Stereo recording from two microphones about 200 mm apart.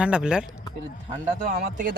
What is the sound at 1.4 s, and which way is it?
Speech, 40° right (ahead or behind).